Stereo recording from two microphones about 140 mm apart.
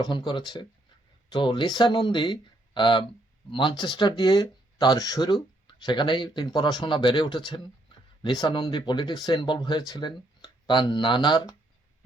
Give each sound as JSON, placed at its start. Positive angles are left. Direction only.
{"t": 0.0, "sound": "speech", "side_deg": 30}